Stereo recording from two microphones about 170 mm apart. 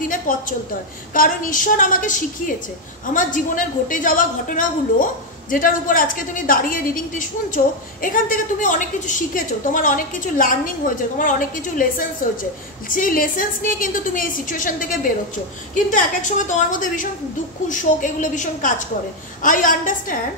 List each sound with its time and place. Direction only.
0.3 s a woman's voice: 50° left (ahead or behind)